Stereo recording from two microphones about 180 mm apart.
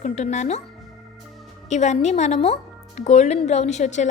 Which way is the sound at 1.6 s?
40° left (ahead or behind).